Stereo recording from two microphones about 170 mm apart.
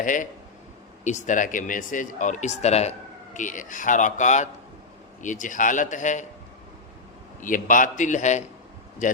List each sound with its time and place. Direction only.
0.0 s speech: 50° left (ahead or behind)
7.4 s speech: 50° left (ahead or behind)